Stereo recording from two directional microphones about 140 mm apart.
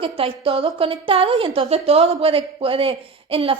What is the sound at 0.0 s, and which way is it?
A woman's voice, 40° right (ahead or behind).